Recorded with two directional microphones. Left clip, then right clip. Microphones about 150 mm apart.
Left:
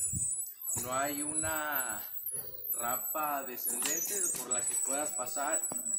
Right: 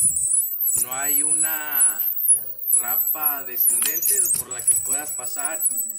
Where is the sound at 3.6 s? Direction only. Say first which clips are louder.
Right 11 dB; 15° right (ahead or behind).